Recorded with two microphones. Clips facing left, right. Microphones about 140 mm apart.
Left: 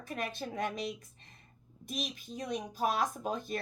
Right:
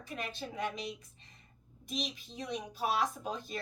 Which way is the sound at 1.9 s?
50° left (ahead or behind).